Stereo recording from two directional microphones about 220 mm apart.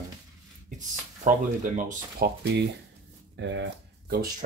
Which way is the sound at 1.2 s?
35° right (ahead or behind).